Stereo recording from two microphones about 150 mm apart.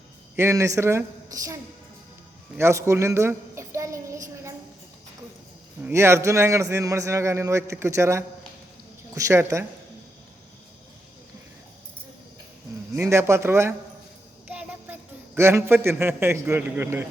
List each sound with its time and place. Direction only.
0.3 s a man's voice: 20° right (ahead or behind)
2.6 s a sound: 20° right (ahead or behind)
5.8 s a man's voice: 20° right (ahead or behind)
13.0 s a man's voice: 20° right (ahead or behind)
14.4 s a sound: 10° right (ahead or behind)
15.4 s a man's voice: 15° right (ahead or behind)